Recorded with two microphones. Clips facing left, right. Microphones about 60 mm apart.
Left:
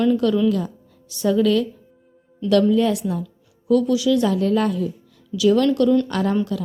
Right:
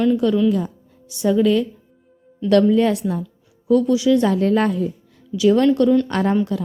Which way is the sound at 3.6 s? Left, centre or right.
Right.